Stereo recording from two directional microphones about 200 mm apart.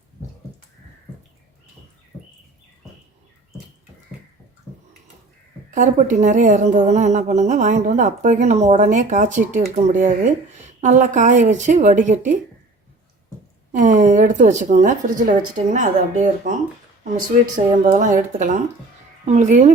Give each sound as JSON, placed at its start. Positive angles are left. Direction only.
{"t": 5.7, "sound": "speech", "side_deg": -40}
{"t": 13.7, "sound": "speech", "side_deg": -35}
{"t": 17.9, "sound": "speech", "side_deg": -40}